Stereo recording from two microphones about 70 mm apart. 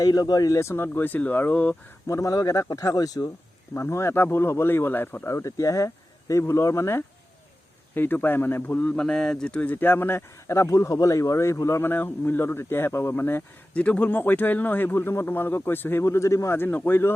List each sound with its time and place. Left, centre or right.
0.0 s speech: left
2.0 s speech: left
3.8 s speech: left
5.3 s a man's voice: left
7.9 s a man's voice: left
9.0 s speech: centre
9.6 s a man's voice: left
11.8 s speech: left
13.7 s a man's voice: centre
16.0 s a man's voice: left
16.6 s speech: left